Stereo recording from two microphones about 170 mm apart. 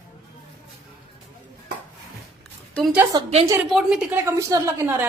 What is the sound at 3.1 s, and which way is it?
Speech, 25° right (ahead or behind).